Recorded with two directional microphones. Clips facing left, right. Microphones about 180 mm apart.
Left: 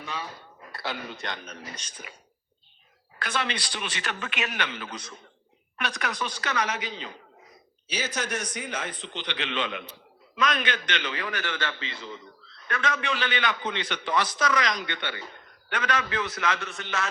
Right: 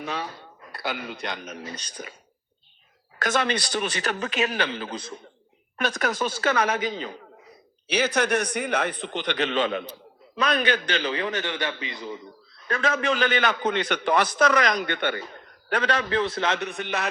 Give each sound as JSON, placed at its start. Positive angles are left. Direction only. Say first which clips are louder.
{"t": 1.1, "sound": "a man's voice", "louder": "right 3 dB", "side_deg": -15}
{"t": 2.0, "sound": "a man's voice", "louder": "right 8 dB", "side_deg": -40}
{"t": 3.2, "sound": "a man's voice", "louder": "right 6 dB", "side_deg": -45}
{"t": 5.7, "sound": "a man's voice", "louder": "right 6 dB", "side_deg": -45}
{"t": 7.9, "sound": "a man's voice", "louder": "right 8 dB", "side_deg": -65}
{"t": 12.6, "sound": "a man's voice", "louder": "right 5 dB", "side_deg": -35}
{"t": 15.7, "sound": "a man's voice", "louder": "right 5 dB", "side_deg": -35}